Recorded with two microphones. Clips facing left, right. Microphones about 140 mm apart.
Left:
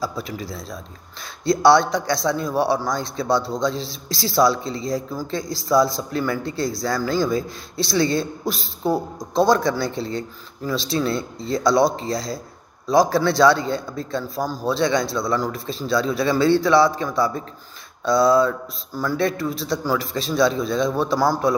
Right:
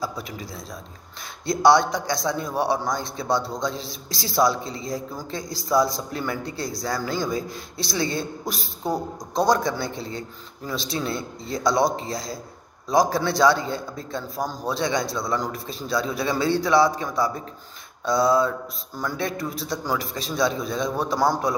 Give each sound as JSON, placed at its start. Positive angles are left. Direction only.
{"t": 0.0, "sound": "a man's voice", "side_deg": -20}